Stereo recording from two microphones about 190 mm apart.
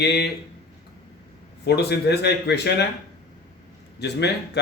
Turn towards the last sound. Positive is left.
turn(degrees=60)  # may be behind; listen again after turning